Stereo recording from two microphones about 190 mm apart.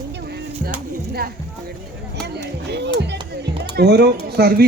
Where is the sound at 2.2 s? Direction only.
60° right (ahead or behind).